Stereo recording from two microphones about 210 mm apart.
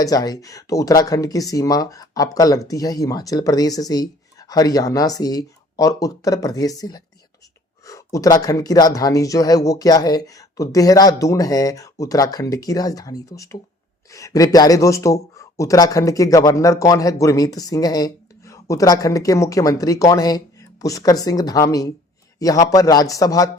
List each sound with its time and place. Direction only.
0.0 s speech: 15° left (ahead or behind)